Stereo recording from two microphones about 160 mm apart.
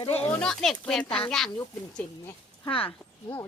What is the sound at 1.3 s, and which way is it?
Speech, 5° left (ahead or behind).